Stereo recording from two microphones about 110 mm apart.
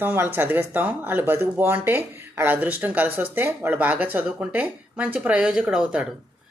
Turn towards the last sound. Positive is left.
turn(degrees=-10)  # may be behind; listen again after turning